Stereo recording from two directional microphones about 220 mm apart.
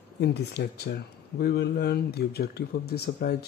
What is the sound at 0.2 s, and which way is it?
Speech, 50° left (ahead or behind).